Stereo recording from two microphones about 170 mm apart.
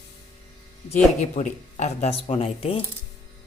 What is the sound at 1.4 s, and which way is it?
Speech, 40° left (ahead or behind).